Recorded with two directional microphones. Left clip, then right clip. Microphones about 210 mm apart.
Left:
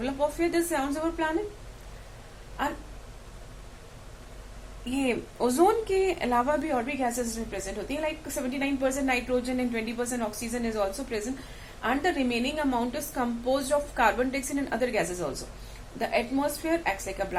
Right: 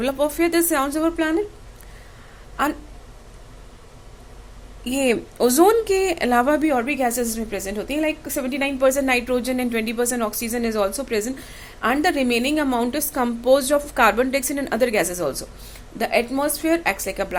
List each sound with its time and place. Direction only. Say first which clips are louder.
0.0 s speech: right 7 dB; 50° right (ahead or behind)
4.9 s speech: right 8 dB; 50° right (ahead or behind)